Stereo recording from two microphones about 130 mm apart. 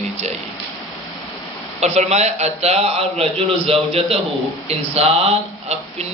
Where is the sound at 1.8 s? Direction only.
55° right (ahead or behind).